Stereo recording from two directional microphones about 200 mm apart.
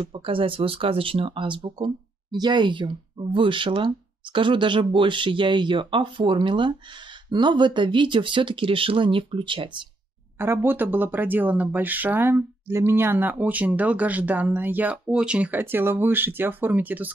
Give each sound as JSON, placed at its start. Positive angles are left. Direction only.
{"t": 0.0, "sound": "speech", "side_deg": -25}
{"t": 10.4, "sound": "speech", "side_deg": -10}